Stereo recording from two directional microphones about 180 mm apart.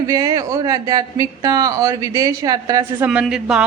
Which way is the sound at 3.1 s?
5° right (ahead or behind).